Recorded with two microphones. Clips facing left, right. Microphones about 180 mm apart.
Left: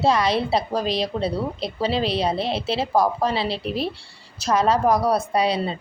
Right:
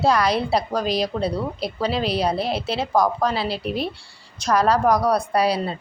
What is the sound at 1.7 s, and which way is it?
Speech, 30° left (ahead or behind).